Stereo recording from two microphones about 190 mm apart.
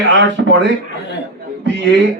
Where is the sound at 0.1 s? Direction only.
75° right (ahead or behind).